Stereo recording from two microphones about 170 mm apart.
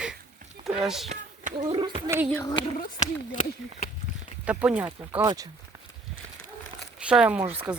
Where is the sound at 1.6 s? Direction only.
30° right (ahead or behind).